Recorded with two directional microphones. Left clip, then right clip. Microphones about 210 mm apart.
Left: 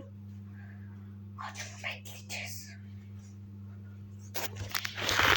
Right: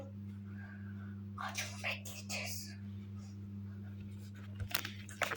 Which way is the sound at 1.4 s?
10° right (ahead or behind).